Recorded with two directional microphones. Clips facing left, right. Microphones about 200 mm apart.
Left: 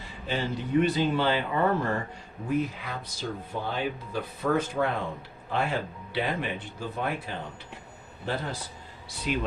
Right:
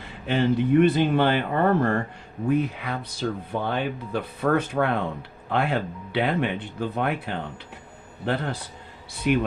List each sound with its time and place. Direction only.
0.3 s speech: 60° right (ahead or behind)